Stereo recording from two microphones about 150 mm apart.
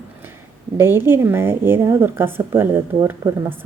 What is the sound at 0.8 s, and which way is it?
Speech, 15° right (ahead or behind).